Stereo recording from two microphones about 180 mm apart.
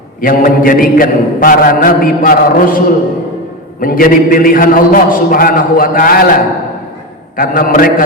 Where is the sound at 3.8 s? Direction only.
50° left (ahead or behind).